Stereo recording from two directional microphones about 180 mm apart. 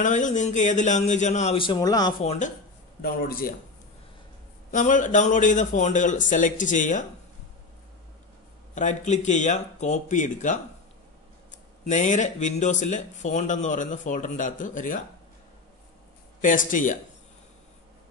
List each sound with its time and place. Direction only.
0.0 s speech: 45° left (ahead or behind); by 2.2 s 20° left (ahead or behind)
2.2 s speech: 45° left (ahead or behind)
3.0 s speech: 55° left (ahead or behind)
4.6 s speech: 45° left (ahead or behind)
8.7 s speech: 40° left (ahead or behind)
11.9 s speech: 45° left (ahead or behind)
16.3 s speech: 45° left (ahead or behind)